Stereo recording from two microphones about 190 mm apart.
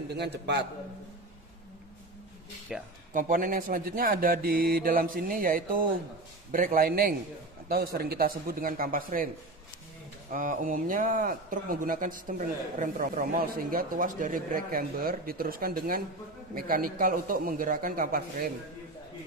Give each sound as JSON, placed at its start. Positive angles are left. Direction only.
{"t": 0.1, "sound": "a man's voice", "side_deg": -60}
{"t": 2.7, "sound": "speech", "side_deg": -5}
{"t": 3.1, "sound": "speech", "side_deg": -45}
{"t": 10.3, "sound": "speech", "side_deg": -45}